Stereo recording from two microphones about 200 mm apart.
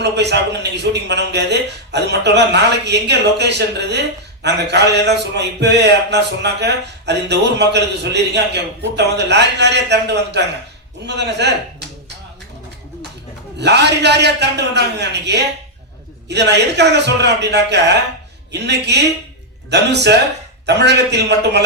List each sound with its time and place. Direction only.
0.0 s a man's voice: 55° right (ahead or behind)
13.6 s a man's voice: 55° right (ahead or behind)